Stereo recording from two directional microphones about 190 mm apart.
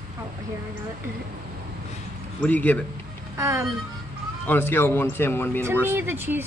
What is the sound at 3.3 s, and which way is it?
Speech, 15° right (ahead or behind).